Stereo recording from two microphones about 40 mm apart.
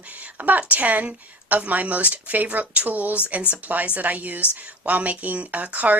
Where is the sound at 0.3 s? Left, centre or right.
Right.